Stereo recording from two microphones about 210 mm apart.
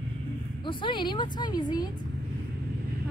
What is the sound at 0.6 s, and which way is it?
Speech, 25° left (ahead or behind).